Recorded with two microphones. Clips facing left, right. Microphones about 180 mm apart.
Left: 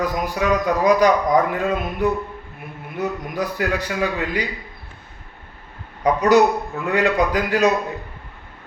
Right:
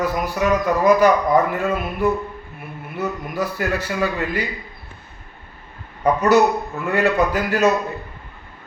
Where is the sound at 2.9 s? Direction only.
15° left (ahead or behind).